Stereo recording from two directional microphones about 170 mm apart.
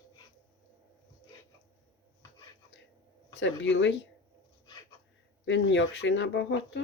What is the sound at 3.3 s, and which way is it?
Speech, 90° left.